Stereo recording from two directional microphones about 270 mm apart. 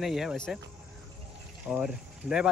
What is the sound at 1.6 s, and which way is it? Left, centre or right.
Speech, centre.